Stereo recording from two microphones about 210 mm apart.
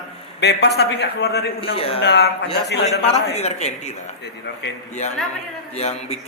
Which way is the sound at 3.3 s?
30° left (ahead or behind).